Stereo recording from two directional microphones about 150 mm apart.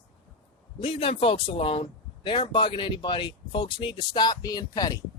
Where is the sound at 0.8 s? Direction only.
35° left (ahead or behind).